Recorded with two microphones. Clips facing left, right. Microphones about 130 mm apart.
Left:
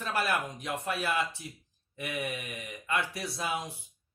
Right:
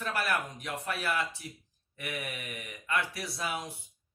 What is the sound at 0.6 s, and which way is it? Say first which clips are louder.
Speech: left 2 dB; 25° left (ahead or behind).